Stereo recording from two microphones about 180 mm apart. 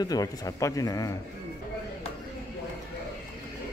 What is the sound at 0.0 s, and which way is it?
Speech, 20° left (ahead or behind).